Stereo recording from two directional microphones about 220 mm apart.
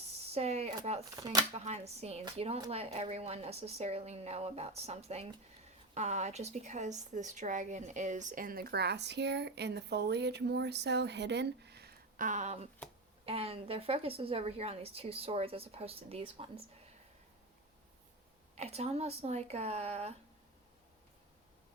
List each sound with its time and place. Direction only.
0.3 s a sound: 30° right (ahead or behind)
1.1 s speech: 15° right (ahead or behind)
1.5 s a woman's voice: 30° right (ahead or behind)
18.5 s a woman's voice: 30° right (ahead or behind)